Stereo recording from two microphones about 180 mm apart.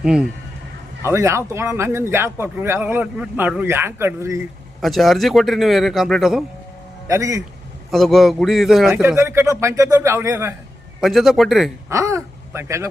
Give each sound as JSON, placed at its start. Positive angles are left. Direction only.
{"t": 0.0, "sound": "speech", "side_deg": -5}
{"t": 1.0, "sound": "speech", "side_deg": -15}
{"t": 4.8, "sound": "speech", "side_deg": 0}
{"t": 7.1, "sound": "speech", "side_deg": -15}
{"t": 7.9, "sound": "speech", "side_deg": 0}
{"t": 9.0, "sound": "speech", "side_deg": -15}
{"t": 11.0, "sound": "speech", "side_deg": 0}
{"t": 11.9, "sound": "speech", "side_deg": -15}